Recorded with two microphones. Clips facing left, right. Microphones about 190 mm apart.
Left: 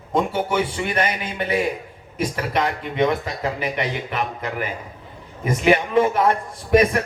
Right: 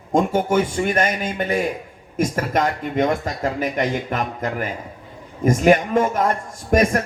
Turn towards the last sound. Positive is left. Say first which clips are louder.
# left 1 dB
turn(degrees=-45)  # may be behind; listen again after turning